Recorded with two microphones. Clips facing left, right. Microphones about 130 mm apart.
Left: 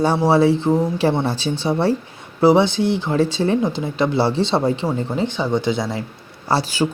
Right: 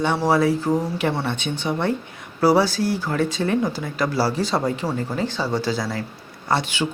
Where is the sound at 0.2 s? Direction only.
30° left (ahead or behind).